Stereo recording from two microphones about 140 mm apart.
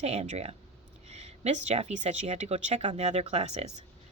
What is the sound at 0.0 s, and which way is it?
Speech, 50° right (ahead or behind).